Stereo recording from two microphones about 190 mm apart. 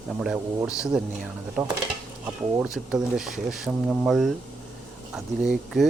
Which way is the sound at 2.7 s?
Centre (ahead or behind).